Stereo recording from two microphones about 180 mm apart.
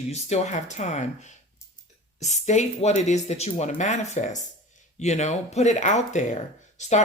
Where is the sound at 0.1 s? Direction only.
40° left (ahead or behind).